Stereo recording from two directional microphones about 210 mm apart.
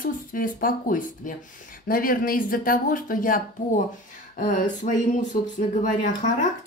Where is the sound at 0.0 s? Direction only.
40° left (ahead or behind).